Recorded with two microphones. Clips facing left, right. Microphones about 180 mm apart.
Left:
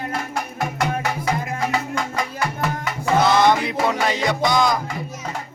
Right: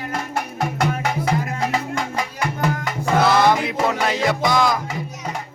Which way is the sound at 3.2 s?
5° right (ahead or behind).